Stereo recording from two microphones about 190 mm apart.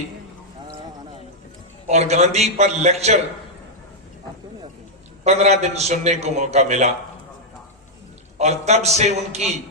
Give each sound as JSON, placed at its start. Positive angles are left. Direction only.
{"t": 1.9, "sound": "a man's voice", "side_deg": -35}
{"t": 5.2, "sound": "a man's voice", "side_deg": -35}
{"t": 8.4, "sound": "a man's voice", "side_deg": -35}